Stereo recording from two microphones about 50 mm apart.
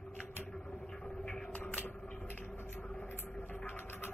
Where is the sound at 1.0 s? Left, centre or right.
Centre.